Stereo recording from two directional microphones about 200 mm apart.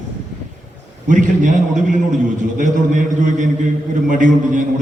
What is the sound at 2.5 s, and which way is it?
Mantra, 40° right (ahead or behind).